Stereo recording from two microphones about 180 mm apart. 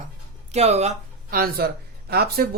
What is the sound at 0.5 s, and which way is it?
Speech, 35° right (ahead or behind).